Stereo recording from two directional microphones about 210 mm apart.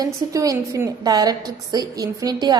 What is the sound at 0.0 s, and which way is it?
A woman's voice, 15° right (ahead or behind).